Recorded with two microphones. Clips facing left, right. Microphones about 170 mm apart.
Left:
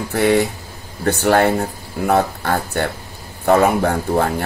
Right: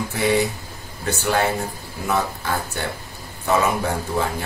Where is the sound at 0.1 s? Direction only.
60° left (ahead or behind).